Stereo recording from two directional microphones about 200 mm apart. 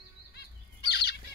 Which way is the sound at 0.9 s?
55° left (ahead or behind).